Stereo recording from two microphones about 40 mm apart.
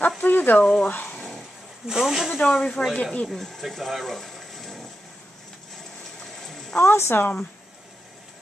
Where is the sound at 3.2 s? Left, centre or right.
Centre.